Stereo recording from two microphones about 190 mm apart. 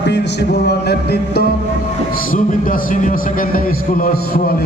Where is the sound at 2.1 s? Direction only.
45° left (ahead or behind).